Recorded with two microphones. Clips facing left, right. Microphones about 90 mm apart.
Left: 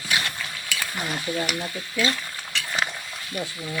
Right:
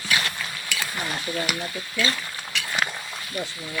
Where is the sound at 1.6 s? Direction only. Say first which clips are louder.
Left 1 dB; 15° left (ahead or behind).